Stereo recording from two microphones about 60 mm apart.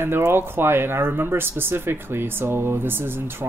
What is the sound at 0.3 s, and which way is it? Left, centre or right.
Speech, right.